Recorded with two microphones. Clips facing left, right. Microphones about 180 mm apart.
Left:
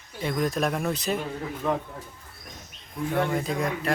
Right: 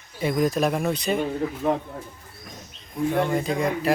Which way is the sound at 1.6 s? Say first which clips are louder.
Right 3 dB; 20° right (ahead or behind).